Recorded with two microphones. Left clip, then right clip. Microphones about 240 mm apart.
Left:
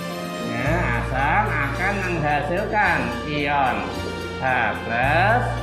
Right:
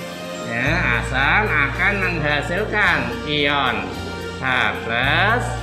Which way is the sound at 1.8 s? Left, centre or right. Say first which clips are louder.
Right 4 dB; right.